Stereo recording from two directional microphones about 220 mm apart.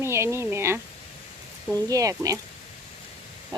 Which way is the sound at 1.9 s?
15° right (ahead or behind).